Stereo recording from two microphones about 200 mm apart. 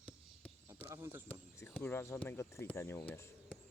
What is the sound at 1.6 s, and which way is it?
Speech, 10° left (ahead or behind).